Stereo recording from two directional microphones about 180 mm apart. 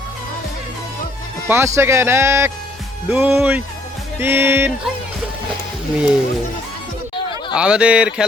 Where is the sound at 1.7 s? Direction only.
15° right (ahead or behind).